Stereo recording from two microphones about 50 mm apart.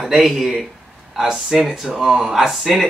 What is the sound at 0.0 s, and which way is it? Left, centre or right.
Speech, centre.